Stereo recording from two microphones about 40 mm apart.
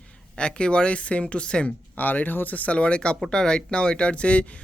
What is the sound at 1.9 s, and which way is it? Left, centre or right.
Speech, left.